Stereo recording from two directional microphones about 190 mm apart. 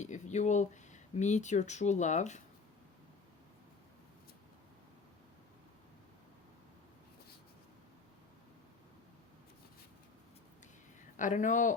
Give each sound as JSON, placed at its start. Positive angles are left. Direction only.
{"t": 0.0, "sound": "speech", "side_deg": 40}
{"t": 11.2, "sound": "speech", "side_deg": 40}